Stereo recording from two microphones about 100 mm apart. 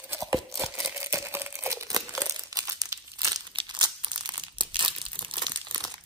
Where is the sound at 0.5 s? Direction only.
30° right (ahead or behind).